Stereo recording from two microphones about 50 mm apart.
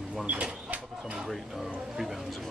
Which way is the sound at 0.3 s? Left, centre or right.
Right.